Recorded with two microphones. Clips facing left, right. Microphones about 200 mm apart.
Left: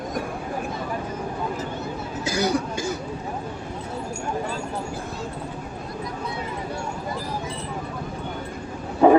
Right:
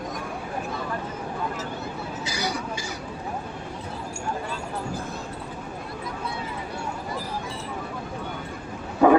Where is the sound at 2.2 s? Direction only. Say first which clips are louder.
Left 8 dB; 50° left (ahead or behind).